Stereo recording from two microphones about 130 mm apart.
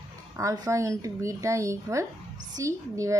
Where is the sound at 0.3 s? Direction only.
25° right (ahead or behind).